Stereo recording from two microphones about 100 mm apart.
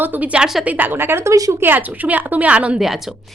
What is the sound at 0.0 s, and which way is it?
A woman's voice, 15° right (ahead or behind).